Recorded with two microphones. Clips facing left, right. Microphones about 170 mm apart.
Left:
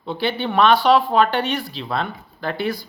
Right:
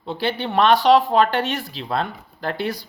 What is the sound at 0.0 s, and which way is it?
Speech, 40° right (ahead or behind).